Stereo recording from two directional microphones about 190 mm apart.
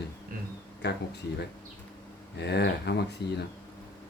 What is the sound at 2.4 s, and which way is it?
Speech, 60° left (ahead or behind).